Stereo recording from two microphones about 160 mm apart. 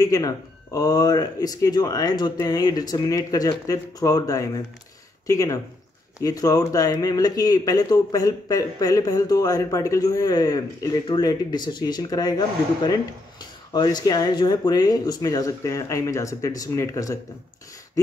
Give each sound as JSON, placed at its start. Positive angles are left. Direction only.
{"t": 0.0, "sound": "speech", "side_deg": 20}